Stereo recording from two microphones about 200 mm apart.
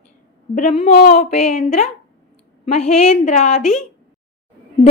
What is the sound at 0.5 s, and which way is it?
A woman's voice, 30° left (ahead or behind).